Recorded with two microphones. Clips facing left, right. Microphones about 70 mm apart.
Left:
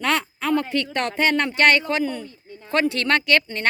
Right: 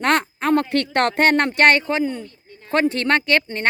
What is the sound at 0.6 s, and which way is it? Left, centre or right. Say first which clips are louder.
Speech: right 5 dB; right.